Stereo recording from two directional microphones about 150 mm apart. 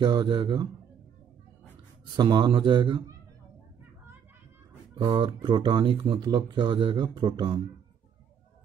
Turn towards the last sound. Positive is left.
turn(degrees=-30)  # may be behind; listen again after turning